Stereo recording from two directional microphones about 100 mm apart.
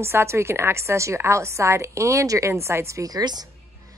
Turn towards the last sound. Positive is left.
turn(degrees=-40)  # may be behind; listen again after turning